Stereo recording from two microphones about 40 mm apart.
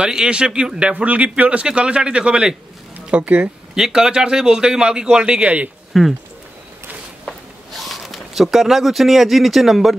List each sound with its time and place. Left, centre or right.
0.0 s a man's voice: centre
3.7 s a man's voice: centre; by 5.7 s right
5.9 s speech: centre
7.2 s zipper: centre